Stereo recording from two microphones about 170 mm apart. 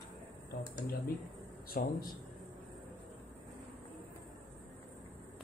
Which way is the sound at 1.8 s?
60° left (ahead or behind).